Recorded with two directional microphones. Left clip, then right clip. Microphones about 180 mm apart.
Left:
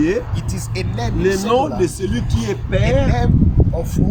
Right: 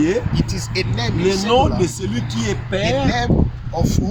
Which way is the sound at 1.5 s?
5° right (ahead or behind).